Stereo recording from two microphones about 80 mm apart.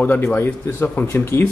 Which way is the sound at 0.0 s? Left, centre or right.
Left.